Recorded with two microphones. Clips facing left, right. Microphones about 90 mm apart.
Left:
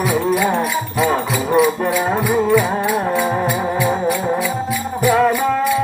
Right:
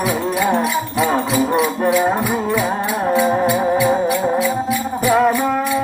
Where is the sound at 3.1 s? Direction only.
15° right (ahead or behind).